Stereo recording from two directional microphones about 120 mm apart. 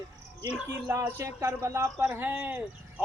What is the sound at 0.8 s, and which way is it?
Speech, 25° right (ahead or behind).